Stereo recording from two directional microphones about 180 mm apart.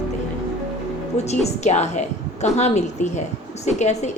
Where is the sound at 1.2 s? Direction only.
40° left (ahead or behind).